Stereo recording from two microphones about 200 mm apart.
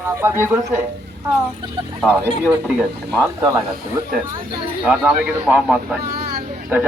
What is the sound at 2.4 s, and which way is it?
Speech, centre (ahead or behind).